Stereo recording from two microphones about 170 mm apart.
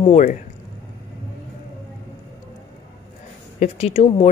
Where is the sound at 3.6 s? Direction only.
40° left (ahead or behind).